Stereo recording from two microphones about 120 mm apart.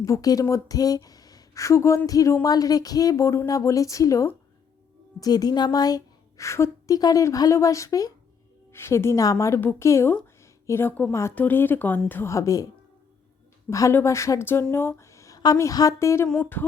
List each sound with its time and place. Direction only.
0.0 s a woman's voice: 30° left (ahead or behind)
13.7 s a woman's voice: 25° left (ahead or behind)